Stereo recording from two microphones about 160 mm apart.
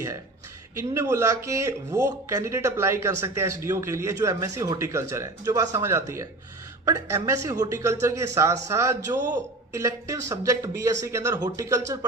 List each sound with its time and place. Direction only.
0.8 s speech: 15° right (ahead or behind)